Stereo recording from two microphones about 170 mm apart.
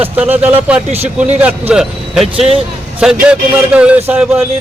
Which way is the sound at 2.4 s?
35° right (ahead or behind).